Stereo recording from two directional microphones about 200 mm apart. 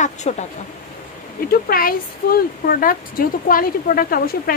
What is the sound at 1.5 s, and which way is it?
A woman's voice, 45° left (ahead or behind).